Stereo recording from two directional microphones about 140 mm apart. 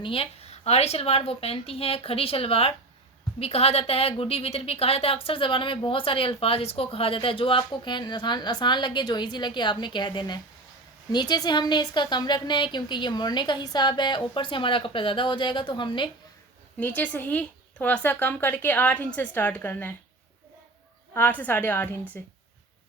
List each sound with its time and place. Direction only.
0.0 s a woman's voice: 40° left (ahead or behind)
16.8 s a woman's voice: 10° left (ahead or behind)
21.1 s a woman's voice: 15° left (ahead or behind)